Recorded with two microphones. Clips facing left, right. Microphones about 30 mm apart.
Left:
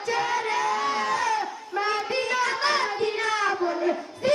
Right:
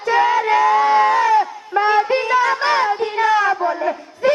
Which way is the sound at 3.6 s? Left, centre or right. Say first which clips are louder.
Right 5 dB; right.